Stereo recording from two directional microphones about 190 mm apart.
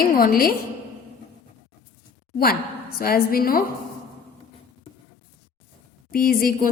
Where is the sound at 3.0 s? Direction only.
50° left (ahead or behind).